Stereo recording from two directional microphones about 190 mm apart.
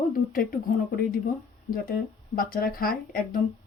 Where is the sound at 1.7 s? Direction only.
50° left (ahead or behind).